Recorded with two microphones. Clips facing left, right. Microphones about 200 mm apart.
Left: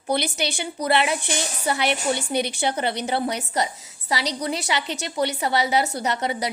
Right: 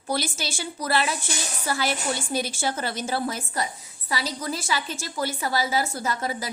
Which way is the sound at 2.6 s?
20° left (ahead or behind).